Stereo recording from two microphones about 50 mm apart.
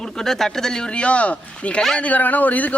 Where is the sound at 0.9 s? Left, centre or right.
Left.